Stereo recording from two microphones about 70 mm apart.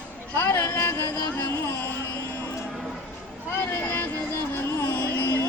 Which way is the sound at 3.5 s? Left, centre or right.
Left.